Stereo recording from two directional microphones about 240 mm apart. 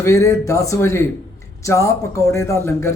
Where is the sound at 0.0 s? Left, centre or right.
Centre.